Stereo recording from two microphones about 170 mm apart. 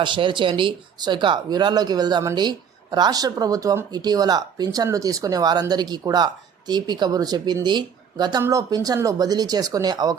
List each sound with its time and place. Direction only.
0.0 s speech: 30° right (ahead or behind)